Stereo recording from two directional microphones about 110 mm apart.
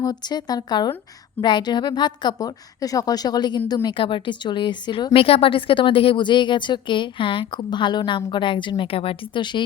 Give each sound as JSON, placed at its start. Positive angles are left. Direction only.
{"t": 0.0, "sound": "a woman's voice", "side_deg": 40}
{"t": 3.8, "sound": "a woman's voice", "side_deg": 50}